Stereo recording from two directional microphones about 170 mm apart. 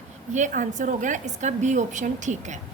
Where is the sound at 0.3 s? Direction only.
50° right (ahead or behind).